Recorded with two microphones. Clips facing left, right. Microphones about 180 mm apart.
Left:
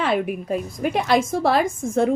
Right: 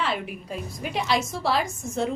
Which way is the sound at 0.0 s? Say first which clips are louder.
Left 7 dB; 55° left (ahead or behind).